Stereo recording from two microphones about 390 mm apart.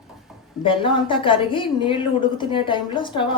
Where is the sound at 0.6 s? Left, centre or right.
Centre.